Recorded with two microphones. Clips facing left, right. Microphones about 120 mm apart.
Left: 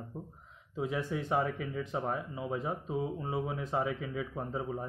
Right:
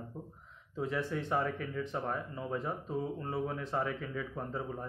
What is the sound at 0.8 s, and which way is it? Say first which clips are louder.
Speech: left 1 dB; 15° left (ahead or behind).